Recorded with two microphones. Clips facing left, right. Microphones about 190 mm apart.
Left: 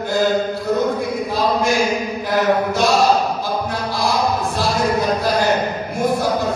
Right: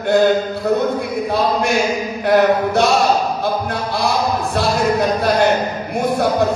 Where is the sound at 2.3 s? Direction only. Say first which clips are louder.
Right 4 dB; 65° right (ahead or behind).